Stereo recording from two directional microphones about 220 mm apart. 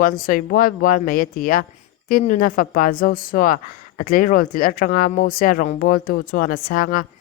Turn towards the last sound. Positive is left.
turn(degrees=40)  # may be behind; listen again after turning